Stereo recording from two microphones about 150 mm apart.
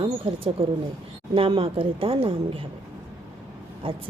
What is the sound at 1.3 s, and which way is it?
A woman's voice, 35° right (ahead or behind).